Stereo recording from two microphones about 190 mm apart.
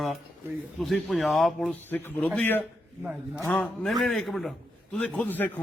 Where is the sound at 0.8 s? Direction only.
Centre (ahead or behind).